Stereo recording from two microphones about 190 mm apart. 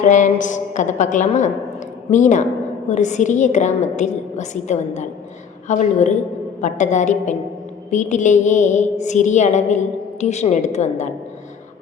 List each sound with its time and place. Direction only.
0.0 s a woman's voice: 40° left (ahead or behind)